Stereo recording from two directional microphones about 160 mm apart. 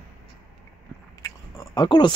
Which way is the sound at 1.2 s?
25° left (ahead or behind).